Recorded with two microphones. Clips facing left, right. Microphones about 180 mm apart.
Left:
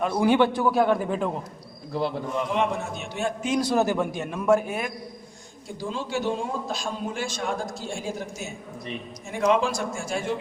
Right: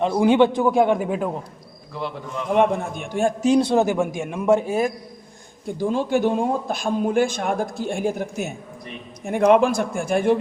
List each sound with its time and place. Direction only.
0.0 s a man's voice: 20° right (ahead or behind)
0.9 s a man's voice: 10° right (ahead or behind)
1.9 s a man's voice: 35° left (ahead or behind)
2.5 s a man's voice: 50° right (ahead or behind)
3.7 s a man's voice: 15° right (ahead or behind)
4.6 s a man's voice: 35° right (ahead or behind)
5.6 s a man's voice: 55° right (ahead or behind)